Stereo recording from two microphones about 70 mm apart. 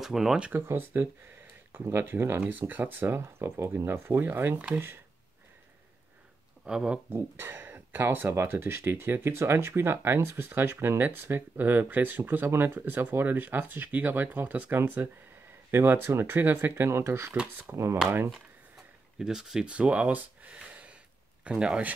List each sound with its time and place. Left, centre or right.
0.0 s speech: centre
0.5 s speech: right
6.6 s speech: centre
7.1 s speech: right
19.1 s speech: centre